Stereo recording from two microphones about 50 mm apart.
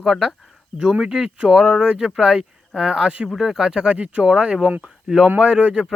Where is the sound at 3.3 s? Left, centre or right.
Centre; by 5.8 s right.